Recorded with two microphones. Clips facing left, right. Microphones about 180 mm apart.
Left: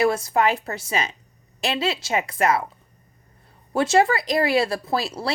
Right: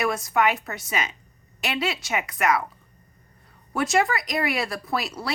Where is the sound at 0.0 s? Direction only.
30° left (ahead or behind).